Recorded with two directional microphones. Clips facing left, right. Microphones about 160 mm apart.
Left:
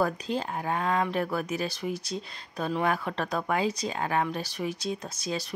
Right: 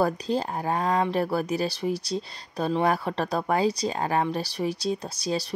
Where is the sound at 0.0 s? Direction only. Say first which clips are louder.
Right 3 dB; 35° right (ahead or behind).